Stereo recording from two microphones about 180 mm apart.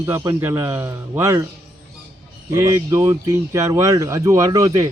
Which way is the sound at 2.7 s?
20° right (ahead or behind).